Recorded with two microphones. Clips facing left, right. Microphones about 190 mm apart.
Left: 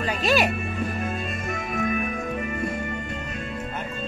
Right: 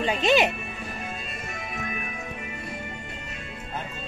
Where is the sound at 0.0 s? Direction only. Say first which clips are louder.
Right 1 dB; 20° right (ahead or behind).